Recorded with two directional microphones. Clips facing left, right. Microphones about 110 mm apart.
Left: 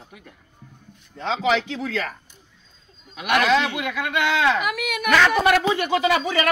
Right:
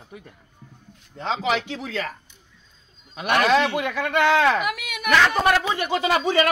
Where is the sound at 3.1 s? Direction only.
35° right (ahead or behind).